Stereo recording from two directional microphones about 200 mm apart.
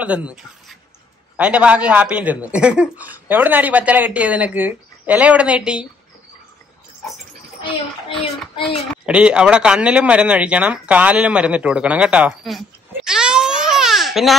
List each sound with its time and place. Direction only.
0.0 s a man's voice: 5° right (ahead or behind)
8.1 s speech: 25° left (ahead or behind)
9.0 s speech: 5° right (ahead or behind)